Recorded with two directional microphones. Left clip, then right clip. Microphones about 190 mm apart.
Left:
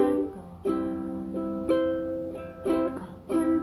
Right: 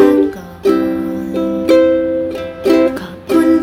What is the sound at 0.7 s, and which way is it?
Music, 35° right (ahead or behind).